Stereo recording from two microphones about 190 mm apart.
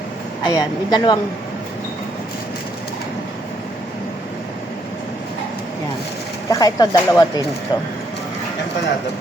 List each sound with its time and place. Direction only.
0.4 s speech: 20° left (ahead or behind)
6.5 s speech: 20° left (ahead or behind)